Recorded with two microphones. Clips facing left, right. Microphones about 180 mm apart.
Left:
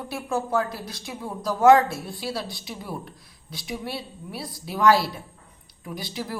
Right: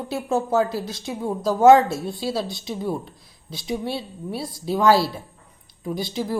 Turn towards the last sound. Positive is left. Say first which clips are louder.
# right 7 dB
turn(degrees=-25)  # may be behind; listen again after turning